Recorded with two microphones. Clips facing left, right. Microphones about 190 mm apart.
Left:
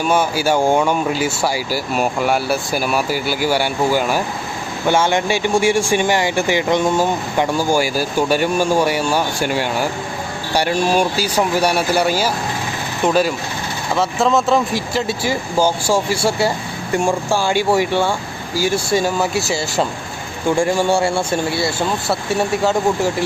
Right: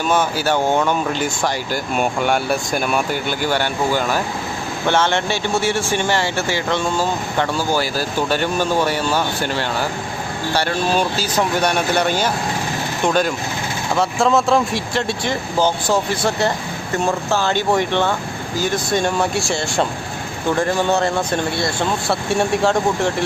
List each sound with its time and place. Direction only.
0.0 s speech: 10° left (ahead or behind)